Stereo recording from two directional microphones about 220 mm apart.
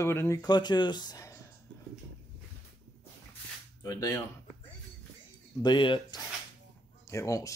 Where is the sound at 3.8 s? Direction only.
15° left (ahead or behind).